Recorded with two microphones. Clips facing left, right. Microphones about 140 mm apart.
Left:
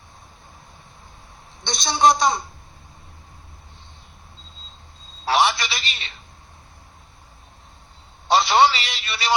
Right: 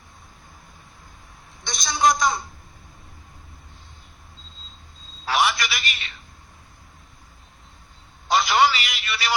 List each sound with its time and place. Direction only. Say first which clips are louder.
1.6 s a woman's voice: left 3 dB; 30° left (ahead or behind)
5.2 s telephone: left 3 dB; 30° left (ahead or behind)
8.3 s a sound: left 3 dB; 30° left (ahead or behind)